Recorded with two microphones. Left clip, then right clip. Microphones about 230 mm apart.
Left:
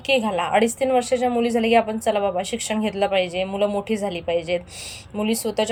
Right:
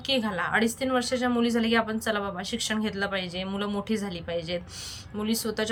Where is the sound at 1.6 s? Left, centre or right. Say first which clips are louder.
Left 7 dB; right.